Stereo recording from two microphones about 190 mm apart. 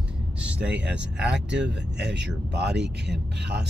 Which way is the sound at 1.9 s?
65° right (ahead or behind).